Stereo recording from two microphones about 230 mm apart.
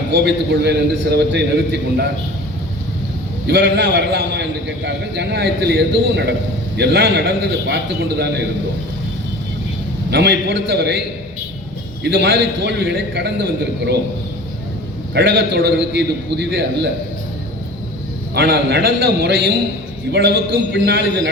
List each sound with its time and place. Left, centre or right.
0.1 s a man's voice: right
3.4 s a man's voice: right
10.1 s a man's voice: right
12.0 s a man's voice: right
15.1 s a man's voice: right
18.3 s a man's voice: right